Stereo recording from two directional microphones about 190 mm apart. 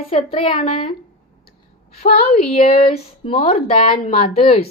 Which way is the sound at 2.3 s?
30° left (ahead or behind).